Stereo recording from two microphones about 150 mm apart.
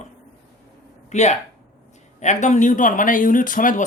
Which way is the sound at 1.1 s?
50° left (ahead or behind).